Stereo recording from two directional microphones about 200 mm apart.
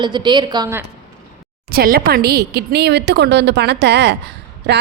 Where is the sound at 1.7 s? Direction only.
50° right (ahead or behind).